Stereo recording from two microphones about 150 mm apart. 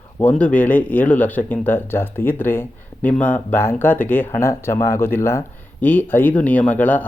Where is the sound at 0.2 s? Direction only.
10° left (ahead or behind).